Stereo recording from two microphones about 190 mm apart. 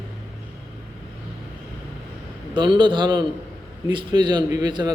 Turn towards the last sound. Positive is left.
turn(degrees=-20)  # may be behind; listen again after turning